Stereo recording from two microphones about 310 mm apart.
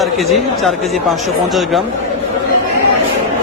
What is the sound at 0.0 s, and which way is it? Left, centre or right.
Speech, centre.